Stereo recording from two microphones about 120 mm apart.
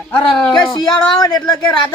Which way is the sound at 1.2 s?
35° left (ahead or behind).